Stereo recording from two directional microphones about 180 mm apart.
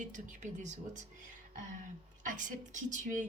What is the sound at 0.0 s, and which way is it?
Speech, 45° right (ahead or behind).